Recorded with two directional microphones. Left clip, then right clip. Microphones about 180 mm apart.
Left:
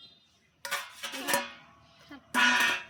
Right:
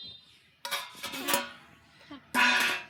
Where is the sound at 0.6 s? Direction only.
15° left (ahead or behind).